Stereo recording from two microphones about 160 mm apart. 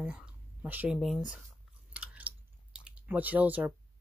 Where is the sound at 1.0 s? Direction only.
5° right (ahead or behind).